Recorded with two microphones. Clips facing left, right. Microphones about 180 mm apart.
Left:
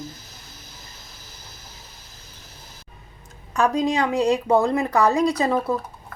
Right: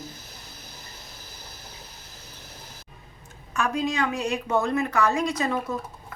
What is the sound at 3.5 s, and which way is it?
Speech, 35° left (ahead or behind).